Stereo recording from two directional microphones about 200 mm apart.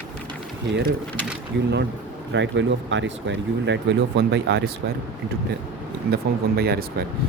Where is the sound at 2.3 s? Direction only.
65° right (ahead or behind).